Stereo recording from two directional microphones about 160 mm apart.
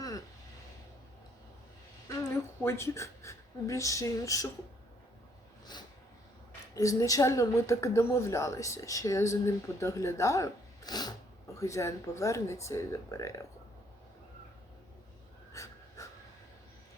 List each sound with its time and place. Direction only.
2.0 s a woman's voice: 15° left (ahead or behind)
6.7 s a woman's voice: 20° left (ahead or behind)
15.5 s dog: 20° left (ahead or behind)